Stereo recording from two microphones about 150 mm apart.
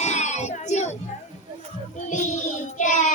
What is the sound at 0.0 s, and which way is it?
Child singing, 50° left (ahead or behind).